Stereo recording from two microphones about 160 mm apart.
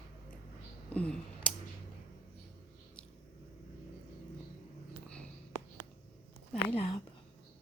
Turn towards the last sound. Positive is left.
turn(degrees=30)  # may be behind; listen again after turning